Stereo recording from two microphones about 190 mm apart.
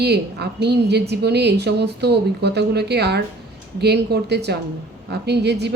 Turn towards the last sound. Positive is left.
turn(degrees=-60)  # may be behind; listen again after turning